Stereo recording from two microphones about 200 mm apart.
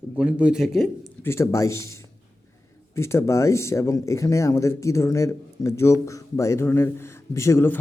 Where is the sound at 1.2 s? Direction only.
15° left (ahead or behind).